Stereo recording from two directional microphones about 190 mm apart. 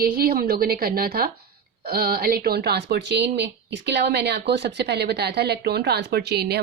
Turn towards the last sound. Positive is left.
turn(degrees=-60)  # may be behind; listen again after turning